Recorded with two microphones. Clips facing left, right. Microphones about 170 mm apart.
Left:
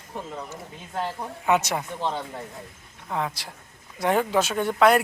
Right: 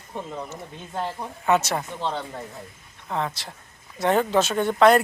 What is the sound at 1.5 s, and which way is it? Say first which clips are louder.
Speech: right 1 dB; 15° left (ahead or behind).